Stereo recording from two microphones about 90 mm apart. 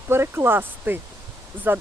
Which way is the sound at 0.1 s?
25° right (ahead or behind).